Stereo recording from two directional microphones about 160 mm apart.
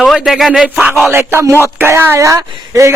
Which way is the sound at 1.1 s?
15° right (ahead or behind).